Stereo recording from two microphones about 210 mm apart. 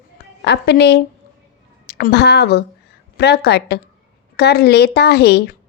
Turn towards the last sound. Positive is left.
turn(degrees=50)  # may be behind; listen again after turning